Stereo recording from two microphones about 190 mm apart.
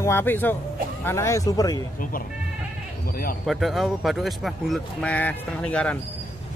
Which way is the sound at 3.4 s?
Centre (ahead or behind).